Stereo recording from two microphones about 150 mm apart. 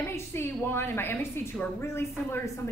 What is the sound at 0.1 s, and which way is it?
A woman's voice, 15° left (ahead or behind).